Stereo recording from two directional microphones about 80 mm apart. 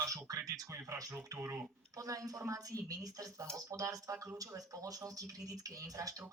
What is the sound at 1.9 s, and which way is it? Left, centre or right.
Speech, right.